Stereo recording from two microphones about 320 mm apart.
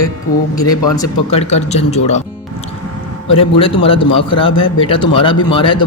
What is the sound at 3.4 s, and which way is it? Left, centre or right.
Speech, centre.